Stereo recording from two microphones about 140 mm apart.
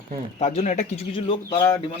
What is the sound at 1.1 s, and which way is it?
Speech, 35° left (ahead or behind).